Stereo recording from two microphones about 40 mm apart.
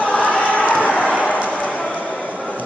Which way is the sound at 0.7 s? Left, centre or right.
Left.